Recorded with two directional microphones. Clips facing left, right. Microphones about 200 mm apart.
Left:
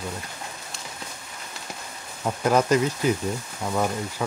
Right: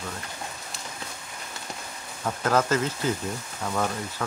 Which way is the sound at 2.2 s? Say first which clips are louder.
Left 3 dB; 15° left (ahead or behind).